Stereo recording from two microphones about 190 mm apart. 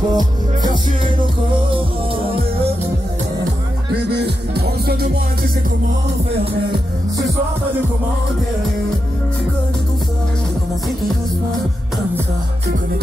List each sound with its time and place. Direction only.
0.1 s music: 20° right (ahead or behind)
4.1 s music: 60° right (ahead or behind)